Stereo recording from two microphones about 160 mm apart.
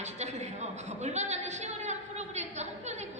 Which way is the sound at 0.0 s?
45° right (ahead or behind).